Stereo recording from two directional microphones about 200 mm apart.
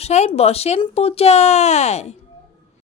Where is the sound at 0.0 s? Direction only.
30° left (ahead or behind).